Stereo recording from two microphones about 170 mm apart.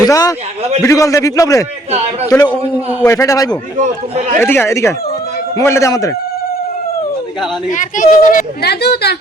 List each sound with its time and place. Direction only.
0.0 s a man's voice: 20° left (ahead or behind)
3.1 s a man's voice: 20° left (ahead or behind)
3.8 s speech: 45° right (ahead or behind)
4.4 s speech: 15° left (ahead or behind)
7.7 s speech: 50° left (ahead or behind); by 9.1 s 75° left (ahead or behind)